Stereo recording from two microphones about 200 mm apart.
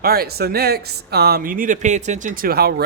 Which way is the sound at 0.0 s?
50° right (ahead or behind).